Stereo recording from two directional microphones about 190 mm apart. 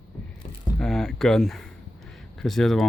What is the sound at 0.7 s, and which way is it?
Speech, 5° left (ahead or behind).